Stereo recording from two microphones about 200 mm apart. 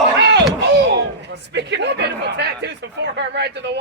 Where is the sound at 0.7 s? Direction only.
60° right (ahead or behind).